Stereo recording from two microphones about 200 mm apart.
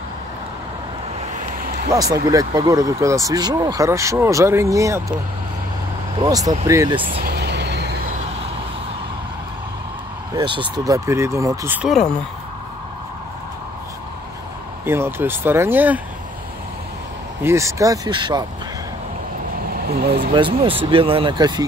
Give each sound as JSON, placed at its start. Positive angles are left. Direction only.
{"t": 1.9, "sound": "speech", "side_deg": -15}
{"t": 6.2, "sound": "speech", "side_deg": -20}
{"t": 7.2, "sound": "vehicle", "side_deg": -55}
{"t": 10.3, "sound": "speech", "side_deg": -25}
{"t": 14.9, "sound": "speech", "side_deg": -10}
{"t": 17.4, "sound": "speech", "side_deg": -15}
{"t": 19.7, "sound": "speech", "side_deg": -50}
{"t": 20.3, "sound": "speech", "side_deg": -25}